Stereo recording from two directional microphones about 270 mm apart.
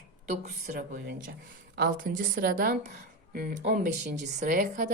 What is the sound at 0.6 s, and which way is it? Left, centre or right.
A woman's voice, right.